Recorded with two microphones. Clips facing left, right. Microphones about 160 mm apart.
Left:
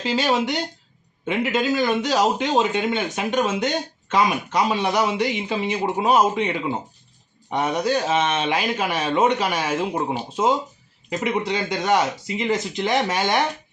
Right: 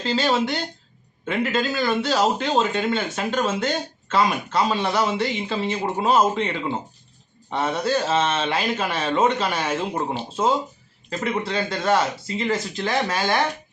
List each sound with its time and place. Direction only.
0.0 s a man's voice: 15° left (ahead or behind)
11.1 s a man's voice: 15° left (ahead or behind)